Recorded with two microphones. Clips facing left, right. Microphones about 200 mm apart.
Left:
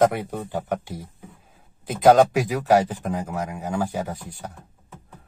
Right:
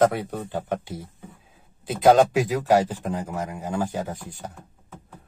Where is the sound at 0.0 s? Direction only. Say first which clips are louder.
Left 1 dB; 10° left (ahead or behind).